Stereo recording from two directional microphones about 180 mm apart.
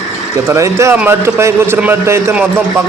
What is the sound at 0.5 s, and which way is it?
A man's voice, 15° right (ahead or behind).